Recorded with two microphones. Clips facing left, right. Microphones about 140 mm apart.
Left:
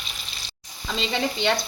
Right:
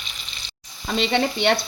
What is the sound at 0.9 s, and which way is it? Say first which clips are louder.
Sizzle: right 5 dB; 65° right (ahead or behind).